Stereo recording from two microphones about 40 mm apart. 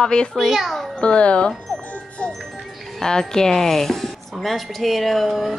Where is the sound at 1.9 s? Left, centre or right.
Left.